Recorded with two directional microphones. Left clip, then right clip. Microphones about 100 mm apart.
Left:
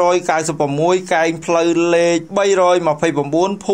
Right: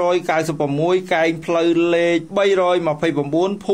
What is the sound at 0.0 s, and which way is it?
Speech, 30° left (ahead or behind).